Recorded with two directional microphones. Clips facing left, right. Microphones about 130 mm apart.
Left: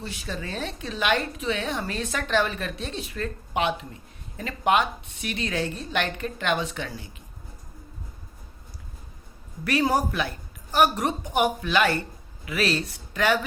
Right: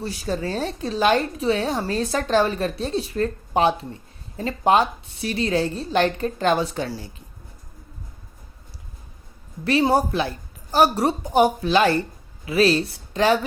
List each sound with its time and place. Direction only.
0.0 s a woman's voice: 40° right (ahead or behind)
9.6 s a woman's voice: 30° right (ahead or behind)